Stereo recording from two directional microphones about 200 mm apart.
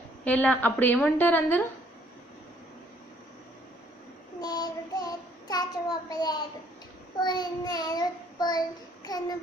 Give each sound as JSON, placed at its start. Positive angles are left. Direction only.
{"t": 0.2, "sound": "a woman's voice", "side_deg": 5}
{"t": 4.4, "sound": "child singing", "side_deg": 20}